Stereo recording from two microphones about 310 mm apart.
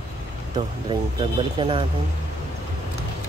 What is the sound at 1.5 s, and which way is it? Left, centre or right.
Speech, centre.